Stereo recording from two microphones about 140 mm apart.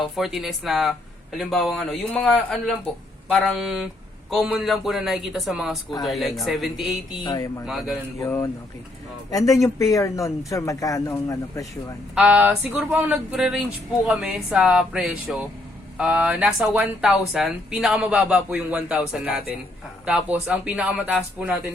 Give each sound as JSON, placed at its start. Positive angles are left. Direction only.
{"t": 0.0, "sound": "a man's voice", "side_deg": 0}
{"t": 7.3, "sound": "speech", "side_deg": 25}
{"t": 12.1, "sound": "speech", "side_deg": -10}